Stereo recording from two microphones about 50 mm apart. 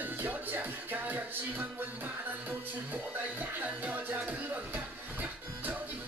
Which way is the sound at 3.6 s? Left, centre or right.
Right.